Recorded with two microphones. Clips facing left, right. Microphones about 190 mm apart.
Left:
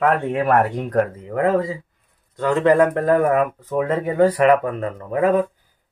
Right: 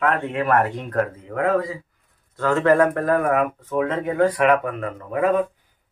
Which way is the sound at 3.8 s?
5° left (ahead or behind).